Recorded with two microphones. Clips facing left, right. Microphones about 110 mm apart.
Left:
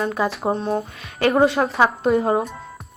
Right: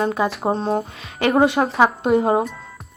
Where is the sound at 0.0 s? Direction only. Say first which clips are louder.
Right 2 dB; 25° right (ahead or behind).